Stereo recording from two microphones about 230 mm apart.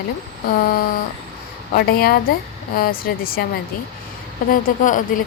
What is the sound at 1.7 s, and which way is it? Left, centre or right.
A woman's voice, left.